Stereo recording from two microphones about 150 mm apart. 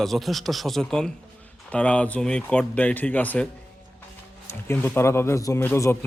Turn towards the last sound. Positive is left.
turn(degrees=15)  # may be behind; listen again after turning